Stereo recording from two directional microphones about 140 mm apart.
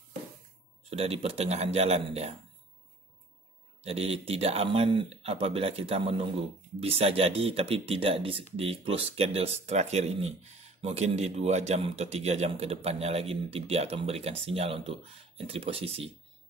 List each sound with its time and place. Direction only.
0.8 s a man's voice: 45° right (ahead or behind)
3.8 s a man's voice: 45° right (ahead or behind)